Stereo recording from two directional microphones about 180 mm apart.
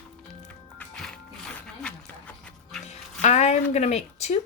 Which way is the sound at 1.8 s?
5° left (ahead or behind).